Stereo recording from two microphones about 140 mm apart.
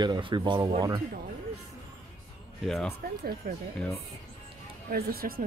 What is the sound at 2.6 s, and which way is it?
Speech, centre (ahead or behind).